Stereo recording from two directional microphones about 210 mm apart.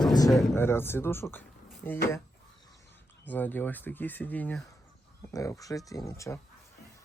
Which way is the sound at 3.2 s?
10° left (ahead or behind).